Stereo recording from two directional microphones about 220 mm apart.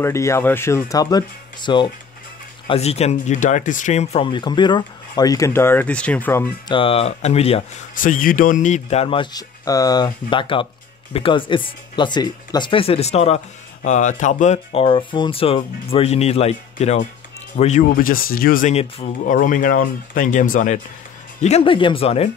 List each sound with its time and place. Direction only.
0.0 s speech: 10° left (ahead or behind)
6.7 s speech: 25° left (ahead or behind)